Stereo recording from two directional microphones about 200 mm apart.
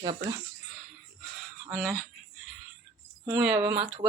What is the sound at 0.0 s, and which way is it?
Speech, 20° right (ahead or behind).